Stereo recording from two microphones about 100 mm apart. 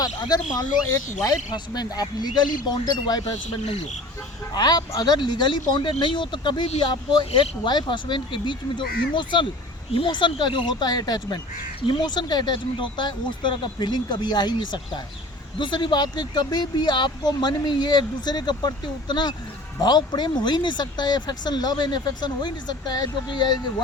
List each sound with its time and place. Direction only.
0.0 s speech: 45° left (ahead or behind)
4.5 s speech: 40° left (ahead or behind)
7.3 s speech: 90° left
7.6 s speech: 50° left (ahead or behind)